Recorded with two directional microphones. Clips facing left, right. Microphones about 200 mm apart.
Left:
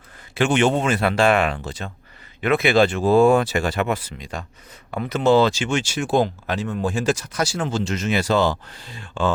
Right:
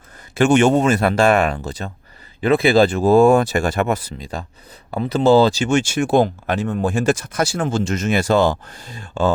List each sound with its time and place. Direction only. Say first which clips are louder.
0.3 s speech: right 5 dB; 45° right (ahead or behind)